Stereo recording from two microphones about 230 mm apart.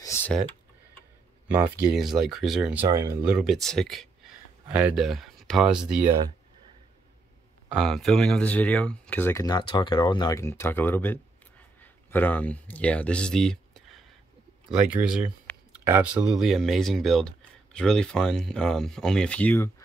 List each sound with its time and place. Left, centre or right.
0.0 s typing: centre
1.9 s speech: centre
2.8 s speech: centre
7.7 s speech: centre